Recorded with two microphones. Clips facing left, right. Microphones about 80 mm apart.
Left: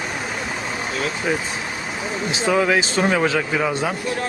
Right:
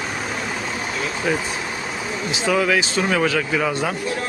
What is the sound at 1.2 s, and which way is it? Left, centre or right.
Speech, centre.